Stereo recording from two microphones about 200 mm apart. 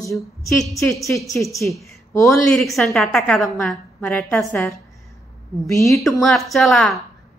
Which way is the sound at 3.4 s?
15° left (ahead or behind).